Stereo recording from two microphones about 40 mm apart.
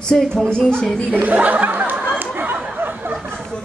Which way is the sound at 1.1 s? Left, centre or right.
Right.